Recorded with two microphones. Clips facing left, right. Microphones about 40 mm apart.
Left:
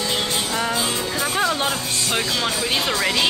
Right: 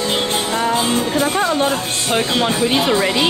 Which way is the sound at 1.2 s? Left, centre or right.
Centre.